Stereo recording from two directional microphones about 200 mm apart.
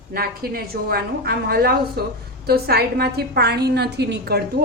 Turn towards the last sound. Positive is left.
turn(degrees=-55)  # may be behind; listen again after turning